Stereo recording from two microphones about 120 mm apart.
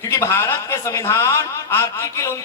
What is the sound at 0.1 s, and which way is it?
A man's voice, 20° left (ahead or behind).